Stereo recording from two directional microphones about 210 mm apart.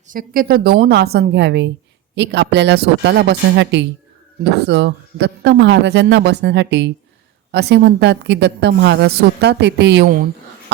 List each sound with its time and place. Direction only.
0.1 s a woman's voice: 45° right (ahead or behind)